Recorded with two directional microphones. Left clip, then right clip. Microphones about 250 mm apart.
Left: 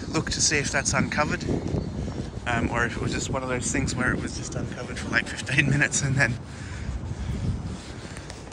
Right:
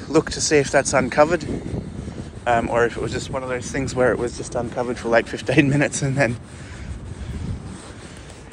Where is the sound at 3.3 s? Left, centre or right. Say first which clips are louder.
Right 2 dB; centre.